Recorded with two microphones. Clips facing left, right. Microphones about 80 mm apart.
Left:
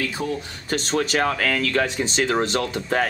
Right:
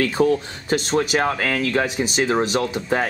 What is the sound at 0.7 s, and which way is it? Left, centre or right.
Speech, centre.